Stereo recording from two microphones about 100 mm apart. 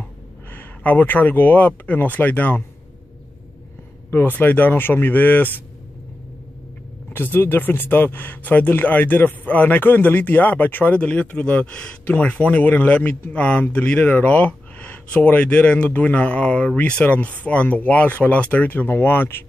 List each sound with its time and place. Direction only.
0.5 s speech: 15° left (ahead or behind)
4.1 s speech: 20° left (ahead or behind)
7.1 s speech: 20° left (ahead or behind)